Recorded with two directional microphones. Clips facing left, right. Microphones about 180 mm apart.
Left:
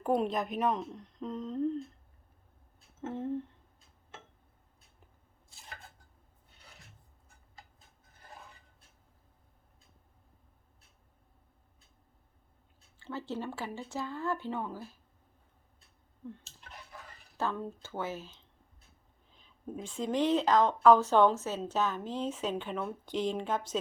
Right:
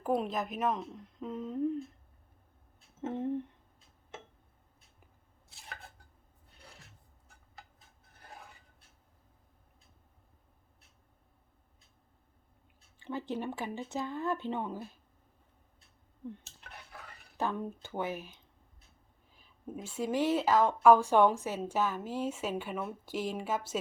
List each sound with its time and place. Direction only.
0.0 s a woman's voice: centre (ahead or behind)
3.0 s speech: 15° right (ahead or behind)
5.5 s dishes: 65° right (ahead or behind)
13.0 s speech: 15° right (ahead or behind)
17.3 s speech: 15° right (ahead or behind)